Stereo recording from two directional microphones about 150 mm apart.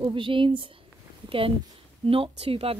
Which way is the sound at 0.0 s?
35° right (ahead or behind).